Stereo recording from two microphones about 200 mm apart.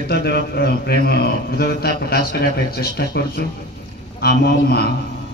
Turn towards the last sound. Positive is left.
turn(degrees=50)  # may be behind; listen again after turning